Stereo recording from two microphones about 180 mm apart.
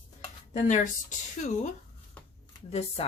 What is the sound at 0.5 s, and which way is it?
Speech, 45° left (ahead or behind).